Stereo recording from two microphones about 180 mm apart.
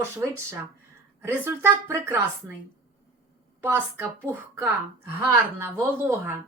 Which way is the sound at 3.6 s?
10° right (ahead or behind).